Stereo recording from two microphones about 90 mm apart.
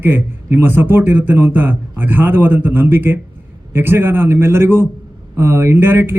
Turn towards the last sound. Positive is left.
turn(degrees=-25)  # may be behind; listen again after turning